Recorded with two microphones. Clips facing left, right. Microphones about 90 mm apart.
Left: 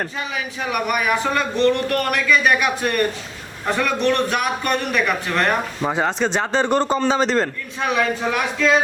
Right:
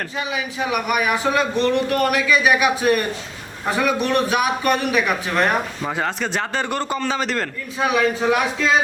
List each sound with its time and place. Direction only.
0.2 s a man's voice: centre (ahead or behind)
5.8 s speech: 20° left (ahead or behind)
7.8 s a man's voice: 5° right (ahead or behind)